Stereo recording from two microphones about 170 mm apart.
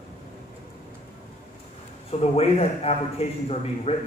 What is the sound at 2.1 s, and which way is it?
A man's voice, 35° left (ahead or behind).